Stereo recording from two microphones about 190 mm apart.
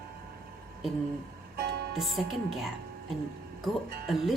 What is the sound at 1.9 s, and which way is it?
Speech, centre (ahead or behind).